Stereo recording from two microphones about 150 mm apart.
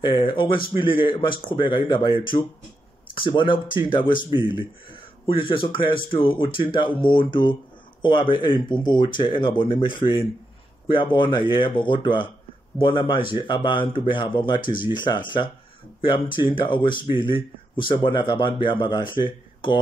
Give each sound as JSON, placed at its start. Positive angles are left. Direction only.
{"t": 0.0, "sound": "speech", "side_deg": 35}